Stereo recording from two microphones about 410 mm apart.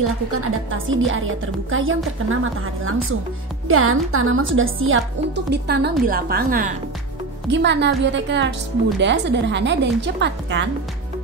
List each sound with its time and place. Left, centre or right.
0.3 s speech: right